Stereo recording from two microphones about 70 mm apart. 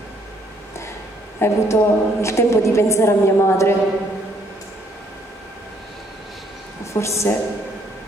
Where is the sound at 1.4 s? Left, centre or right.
Left.